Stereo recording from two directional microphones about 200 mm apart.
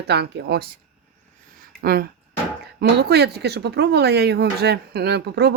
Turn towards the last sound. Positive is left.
turn(degrees=-55)  # may be behind; listen again after turning